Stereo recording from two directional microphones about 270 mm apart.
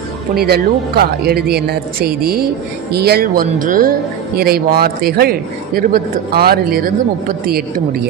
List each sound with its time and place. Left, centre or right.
0.3 s a man's voice: right